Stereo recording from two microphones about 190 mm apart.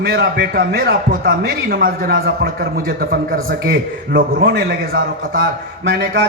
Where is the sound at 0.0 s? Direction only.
60° right (ahead or behind).